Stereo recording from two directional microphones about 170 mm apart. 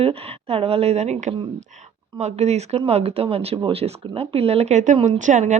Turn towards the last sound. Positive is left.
turn(degrees=-45)  # may be behind; listen again after turning